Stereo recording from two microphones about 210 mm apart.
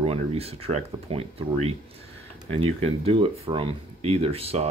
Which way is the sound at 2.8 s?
25° right (ahead or behind).